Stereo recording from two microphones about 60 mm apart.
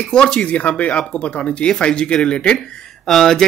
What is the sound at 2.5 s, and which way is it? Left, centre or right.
Speech, centre.